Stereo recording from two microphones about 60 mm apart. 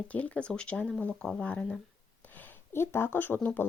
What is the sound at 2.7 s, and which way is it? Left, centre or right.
Speech, left.